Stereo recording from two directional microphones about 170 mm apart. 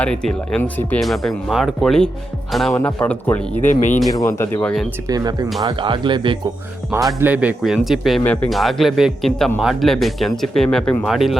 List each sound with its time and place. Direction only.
0.0 s speech: 5° left (ahead or behind)
3.6 s speech: 45° left (ahead or behind)
4.1 s speech: 15° left (ahead or behind)
5.0 s speech: 20° right (ahead or behind)
7.2 s speech: 10° right (ahead or behind)